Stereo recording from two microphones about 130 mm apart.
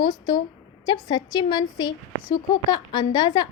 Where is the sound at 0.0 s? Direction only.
35° left (ahead or behind).